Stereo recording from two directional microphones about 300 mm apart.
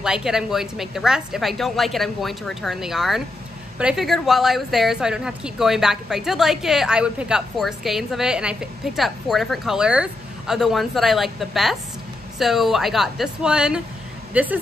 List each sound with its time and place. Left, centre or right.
0.0 s speech: centre